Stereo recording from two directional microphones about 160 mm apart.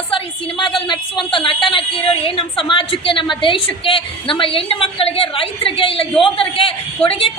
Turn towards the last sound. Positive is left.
turn(degrees=35)  # may be behind; listen again after turning